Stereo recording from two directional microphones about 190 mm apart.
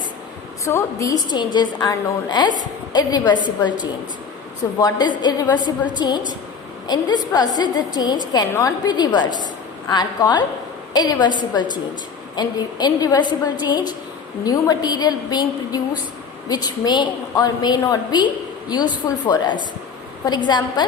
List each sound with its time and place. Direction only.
0.6 s a woman's voice: 15° left (ahead or behind)
4.8 s a woman's voice: 20° left (ahead or behind)